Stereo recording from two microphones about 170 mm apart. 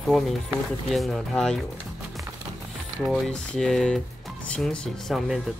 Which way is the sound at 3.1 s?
5° left (ahead or behind).